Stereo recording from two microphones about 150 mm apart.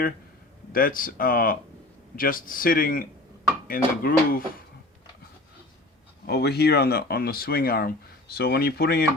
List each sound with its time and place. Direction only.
0.7 s speech: 70° left (ahead or behind)
6.2 s speech: 90° left